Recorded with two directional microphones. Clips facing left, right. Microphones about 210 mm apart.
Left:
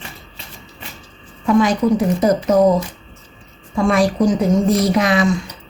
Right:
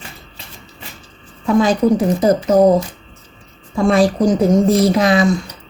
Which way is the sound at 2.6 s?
35° right (ahead or behind).